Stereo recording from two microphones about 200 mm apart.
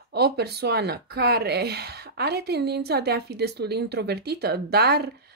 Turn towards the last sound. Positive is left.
turn(degrees=-55)  # may be behind; listen again after turning